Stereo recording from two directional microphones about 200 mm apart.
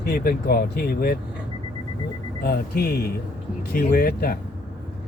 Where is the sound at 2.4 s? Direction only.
50° left (ahead or behind).